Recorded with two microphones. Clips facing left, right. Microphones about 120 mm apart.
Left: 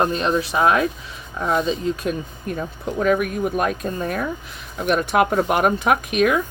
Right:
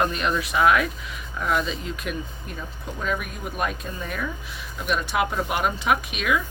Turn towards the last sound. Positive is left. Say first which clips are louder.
# left 5 dB
turn(degrees=50)  # may be behind; listen again after turning